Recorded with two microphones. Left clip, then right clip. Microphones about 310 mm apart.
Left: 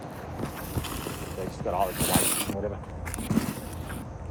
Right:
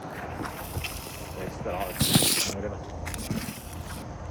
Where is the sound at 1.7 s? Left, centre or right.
Centre.